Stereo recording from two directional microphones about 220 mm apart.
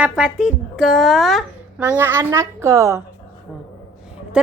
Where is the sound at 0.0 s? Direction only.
5° right (ahead or behind).